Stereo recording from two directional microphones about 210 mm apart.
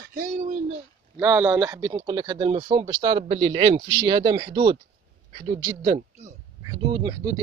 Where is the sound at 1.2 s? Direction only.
5° right (ahead or behind).